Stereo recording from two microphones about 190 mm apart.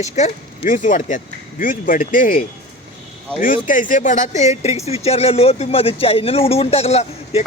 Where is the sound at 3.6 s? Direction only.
45° left (ahead or behind).